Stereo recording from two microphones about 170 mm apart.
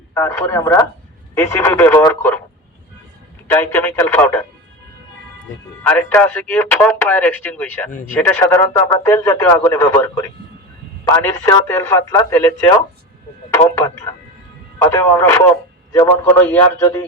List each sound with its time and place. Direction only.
0.1 s speech: 15° left (ahead or behind)
3.4 s speech: 10° left (ahead or behind)
5.8 s speech: 10° left (ahead or behind)
13.7 s speech: 15° left (ahead or behind)
16.5 s speech: 15° left (ahead or behind)